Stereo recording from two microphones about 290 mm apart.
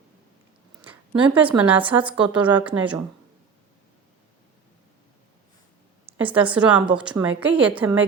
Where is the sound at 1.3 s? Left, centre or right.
Centre.